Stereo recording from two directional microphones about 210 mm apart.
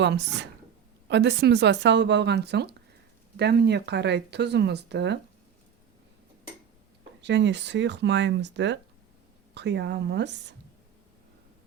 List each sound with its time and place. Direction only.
0.0 s speech: 55° right (ahead or behind)
7.2 s speech: 55° right (ahead or behind)